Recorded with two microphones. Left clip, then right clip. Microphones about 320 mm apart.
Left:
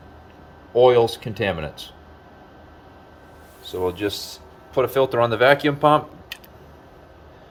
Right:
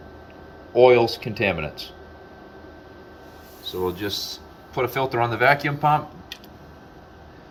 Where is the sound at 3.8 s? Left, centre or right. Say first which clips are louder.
Left 2 dB; left.